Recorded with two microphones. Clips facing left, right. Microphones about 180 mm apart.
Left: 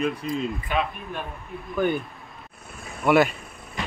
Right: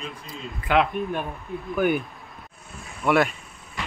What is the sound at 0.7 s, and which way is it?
Speech, 90° right.